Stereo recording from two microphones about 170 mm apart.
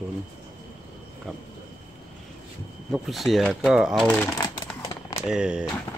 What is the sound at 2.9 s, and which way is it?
Speech, centre (ahead or behind).